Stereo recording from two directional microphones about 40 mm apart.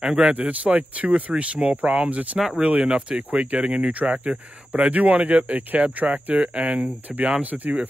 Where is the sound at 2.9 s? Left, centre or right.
Right.